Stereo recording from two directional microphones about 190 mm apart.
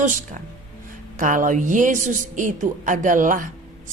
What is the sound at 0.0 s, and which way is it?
A woman's voice, 40° right (ahead or behind).